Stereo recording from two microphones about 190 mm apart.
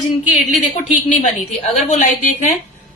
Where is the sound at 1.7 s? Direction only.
40° left (ahead or behind).